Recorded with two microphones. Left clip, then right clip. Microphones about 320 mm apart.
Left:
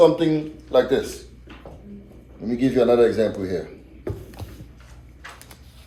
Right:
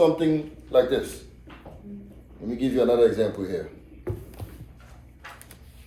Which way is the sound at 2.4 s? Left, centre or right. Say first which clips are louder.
Left 4 dB; left.